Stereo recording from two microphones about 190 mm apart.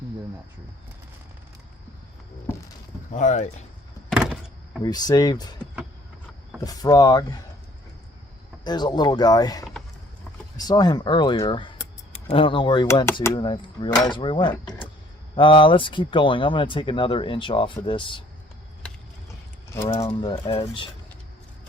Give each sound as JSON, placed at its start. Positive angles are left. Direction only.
{"t": 2.5, "sound": "a sound", "side_deg": 10}
{"t": 3.2, "sound": "speech", "side_deg": 40}
{"t": 4.1, "sound": "power windows", "side_deg": -5}
{"t": 4.8, "sound": "speech", "side_deg": 20}
{"t": 6.6, "sound": "speech", "side_deg": 20}
{"t": 8.6, "sound": "speech", "side_deg": 20}
{"t": 19.7, "sound": "speech", "side_deg": 15}
{"t": 20.1, "sound": "speech", "side_deg": 25}